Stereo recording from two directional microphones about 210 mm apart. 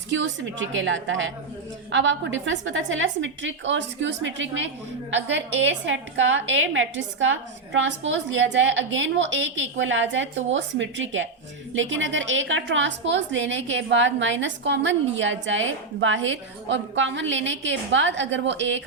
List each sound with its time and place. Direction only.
0.1 s a woman's voice: 65° right (ahead or behind)